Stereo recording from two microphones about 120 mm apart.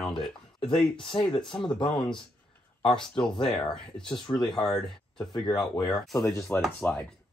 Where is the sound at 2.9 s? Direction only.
5° left (ahead or behind).